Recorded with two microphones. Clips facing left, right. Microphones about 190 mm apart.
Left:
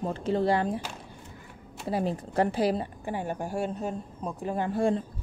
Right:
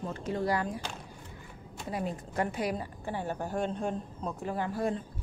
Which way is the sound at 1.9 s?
30° left (ahead or behind).